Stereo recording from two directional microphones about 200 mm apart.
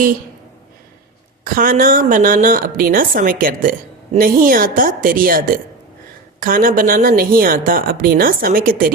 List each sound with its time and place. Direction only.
1.5 s a woman's voice: 45° right (ahead or behind)